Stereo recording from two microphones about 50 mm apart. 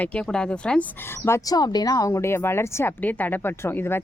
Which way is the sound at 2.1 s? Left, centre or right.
Left.